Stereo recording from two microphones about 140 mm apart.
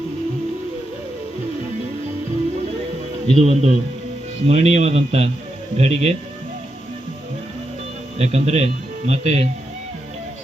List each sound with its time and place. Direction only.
3.3 s speech: 50° right (ahead or behind)
8.2 s speech: 50° right (ahead or behind)